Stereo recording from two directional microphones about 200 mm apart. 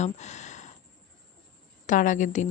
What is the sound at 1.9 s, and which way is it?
Speech, 40° left (ahead or behind).